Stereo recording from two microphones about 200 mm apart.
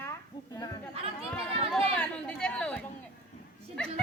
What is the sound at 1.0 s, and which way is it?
Speech, 30° right (ahead or behind).